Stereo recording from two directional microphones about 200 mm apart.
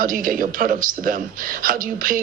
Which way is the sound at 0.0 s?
45° right (ahead or behind).